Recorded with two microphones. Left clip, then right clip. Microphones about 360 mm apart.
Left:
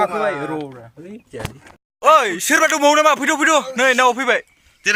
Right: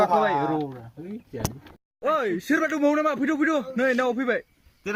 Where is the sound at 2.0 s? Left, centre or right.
Centre.